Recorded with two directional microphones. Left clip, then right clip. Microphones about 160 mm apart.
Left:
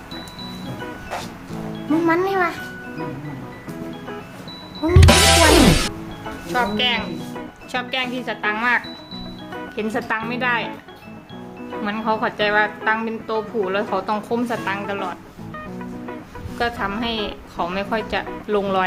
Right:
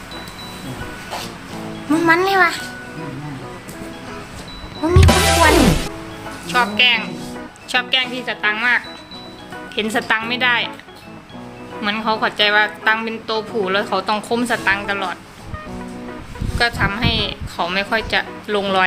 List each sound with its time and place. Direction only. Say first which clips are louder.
1.9 s a child's voice: right 4 dB; 10° left (ahead or behind)
4.8 s music: even; centre (ahead or behind)
6.5 s a woman's voice: right 5 dB; 25° left (ahead or behind)
7.3 s music: right 8 dB; 5° left (ahead or behind)
8.1 s a woman's voice: right 3 dB; 20° left (ahead or behind)
9.7 s a woman's voice: right 5 dB; centre (ahead or behind)
11.7 s a woman's voice: right 3 dB; 5° left (ahead or behind)
16.6 s a woman's voice: right 5 dB; 20° left (ahead or behind)